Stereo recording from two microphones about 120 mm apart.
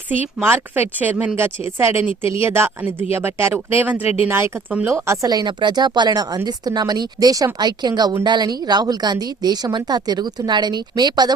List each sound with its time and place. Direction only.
0.4 s speech: 15° right (ahead or behind); by 11.3 s 35° right (ahead or behind)